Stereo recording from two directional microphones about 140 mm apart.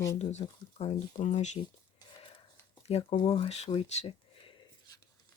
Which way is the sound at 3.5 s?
45° left (ahead or behind).